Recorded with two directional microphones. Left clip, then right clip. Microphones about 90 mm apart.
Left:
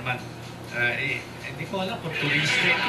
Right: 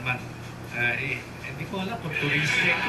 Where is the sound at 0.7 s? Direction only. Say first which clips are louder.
Left 1 dB; 35° left (ahead or behind).